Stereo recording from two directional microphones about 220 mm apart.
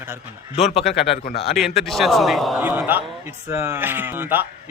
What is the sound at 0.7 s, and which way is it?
Speech, 30° left (ahead or behind).